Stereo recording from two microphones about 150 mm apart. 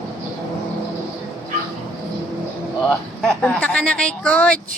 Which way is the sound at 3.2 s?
5° left (ahead or behind).